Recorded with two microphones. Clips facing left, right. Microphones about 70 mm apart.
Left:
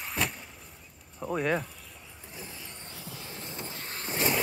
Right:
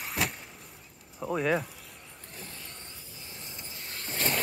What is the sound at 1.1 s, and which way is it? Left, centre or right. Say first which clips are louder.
Speech: right 1 dB; centre.